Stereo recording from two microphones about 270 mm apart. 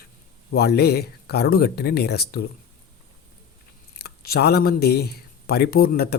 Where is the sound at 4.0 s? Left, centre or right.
Left.